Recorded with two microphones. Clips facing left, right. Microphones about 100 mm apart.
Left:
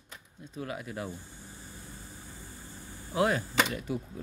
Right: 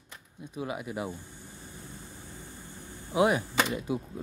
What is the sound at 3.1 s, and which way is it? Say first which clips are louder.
Speech: right 3 dB; 15° right (ahead or behind).